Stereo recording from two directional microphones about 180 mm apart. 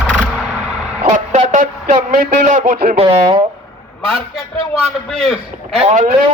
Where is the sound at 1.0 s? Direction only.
40° right (ahead or behind).